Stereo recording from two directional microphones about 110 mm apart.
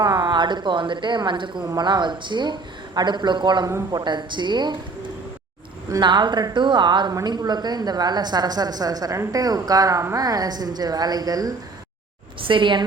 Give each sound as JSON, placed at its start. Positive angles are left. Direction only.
{"t": 0.0, "sound": "a woman's voice", "side_deg": -40}
{"t": 5.9, "sound": "a woman's voice", "side_deg": -45}
{"t": 12.4, "sound": "speech", "side_deg": -50}